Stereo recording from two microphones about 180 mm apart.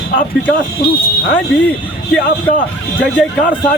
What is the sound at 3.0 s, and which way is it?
Speech, 10° left (ahead or behind).